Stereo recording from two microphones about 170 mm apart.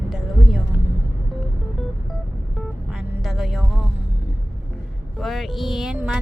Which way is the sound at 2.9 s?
Centre (ahead or behind).